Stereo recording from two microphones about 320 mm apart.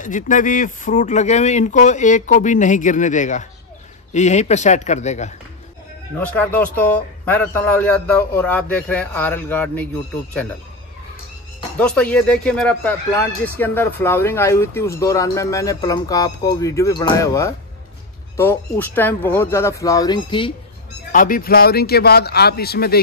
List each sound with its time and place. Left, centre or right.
0.0 s speech: left
6.1 s a man's voice: centre
11.8 s speech: centre
21.1 s speech: left